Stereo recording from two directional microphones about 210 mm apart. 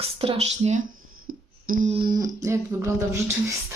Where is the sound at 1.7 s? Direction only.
35° right (ahead or behind).